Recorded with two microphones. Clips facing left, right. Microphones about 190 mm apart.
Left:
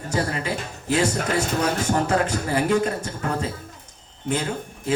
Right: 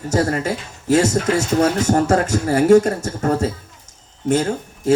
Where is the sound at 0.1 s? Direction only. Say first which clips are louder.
Right 6 dB; 45° right (ahead or behind).